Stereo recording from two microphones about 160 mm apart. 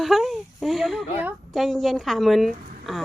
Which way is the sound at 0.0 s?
Centre (ahead or behind).